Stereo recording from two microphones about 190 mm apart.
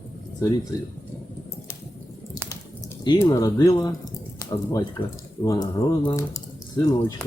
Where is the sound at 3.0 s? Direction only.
20° left (ahead or behind).